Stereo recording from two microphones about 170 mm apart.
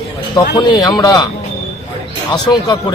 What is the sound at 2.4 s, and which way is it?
Speech, 25° left (ahead or behind).